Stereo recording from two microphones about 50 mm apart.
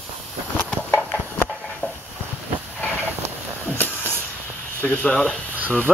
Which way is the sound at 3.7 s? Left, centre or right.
Left.